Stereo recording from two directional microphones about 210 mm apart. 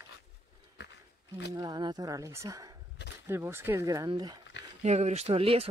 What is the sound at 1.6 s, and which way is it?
Speech, 20° right (ahead or behind).